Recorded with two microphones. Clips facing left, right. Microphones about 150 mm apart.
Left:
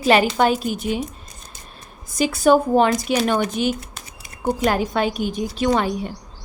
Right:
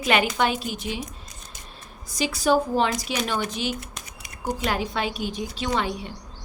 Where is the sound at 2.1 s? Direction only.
50° left (ahead or behind).